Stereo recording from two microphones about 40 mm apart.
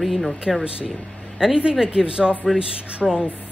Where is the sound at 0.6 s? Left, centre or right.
Right.